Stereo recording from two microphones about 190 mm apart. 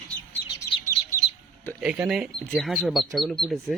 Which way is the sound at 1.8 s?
5° right (ahead or behind).